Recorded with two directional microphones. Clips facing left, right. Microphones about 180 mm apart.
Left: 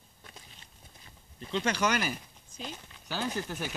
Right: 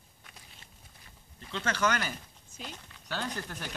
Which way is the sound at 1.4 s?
15° left (ahead or behind).